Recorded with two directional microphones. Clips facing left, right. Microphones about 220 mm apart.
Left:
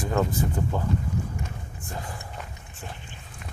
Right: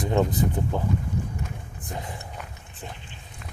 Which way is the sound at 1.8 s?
20° right (ahead or behind).